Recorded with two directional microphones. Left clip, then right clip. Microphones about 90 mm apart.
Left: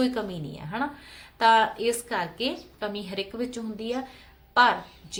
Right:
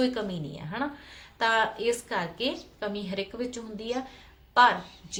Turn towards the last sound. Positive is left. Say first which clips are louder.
# left 1 dB
turn(degrees=35)  # may be behind; listen again after turning